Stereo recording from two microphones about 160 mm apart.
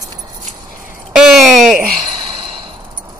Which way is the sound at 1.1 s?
Centre (ahead or behind).